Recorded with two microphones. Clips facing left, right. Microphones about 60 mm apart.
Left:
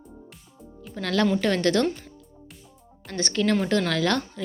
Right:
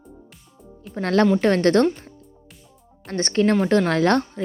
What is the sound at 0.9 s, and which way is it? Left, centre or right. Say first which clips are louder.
Speech: right 5 dB; right.